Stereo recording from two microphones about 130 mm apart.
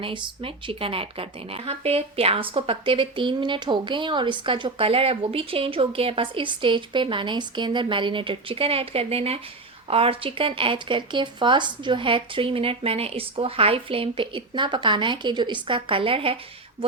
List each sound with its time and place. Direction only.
0.0 s a woman's voice: 40° right (ahead or behind)